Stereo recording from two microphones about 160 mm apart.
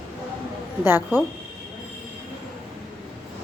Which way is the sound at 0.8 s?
15° right (ahead or behind).